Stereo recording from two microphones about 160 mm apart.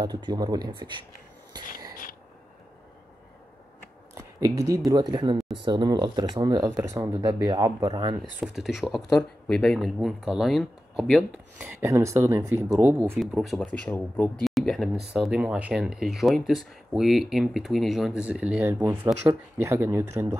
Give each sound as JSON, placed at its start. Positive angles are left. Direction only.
{"t": 0.0, "sound": "speech", "side_deg": -25}
{"t": 4.1, "sound": "speech", "side_deg": -20}
{"t": 8.2, "sound": "speech", "side_deg": -5}
{"t": 11.8, "sound": "speech", "side_deg": -20}
{"t": 13.2, "sound": "speech", "side_deg": 0}
{"t": 13.7, "sound": "speech", "side_deg": 10}
{"t": 14.4, "sound": "speech", "side_deg": 0}